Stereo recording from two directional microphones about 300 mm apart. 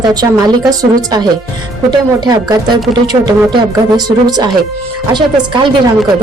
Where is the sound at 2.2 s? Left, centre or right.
Centre.